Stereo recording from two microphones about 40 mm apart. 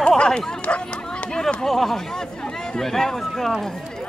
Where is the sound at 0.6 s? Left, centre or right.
Left.